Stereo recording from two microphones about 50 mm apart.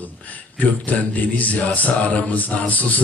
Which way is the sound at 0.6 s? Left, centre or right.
Left.